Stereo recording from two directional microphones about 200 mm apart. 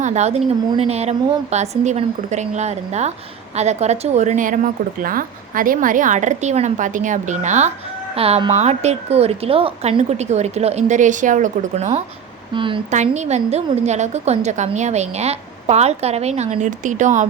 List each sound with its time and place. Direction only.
0.0 s a woman's voice: 35° right (ahead or behind)
12.9 s a woman's voice: 35° right (ahead or behind)